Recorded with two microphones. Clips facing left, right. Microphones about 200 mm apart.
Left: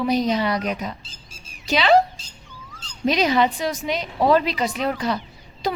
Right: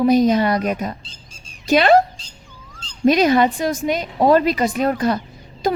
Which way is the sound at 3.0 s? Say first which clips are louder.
Right 5 dB; 50° right (ahead or behind).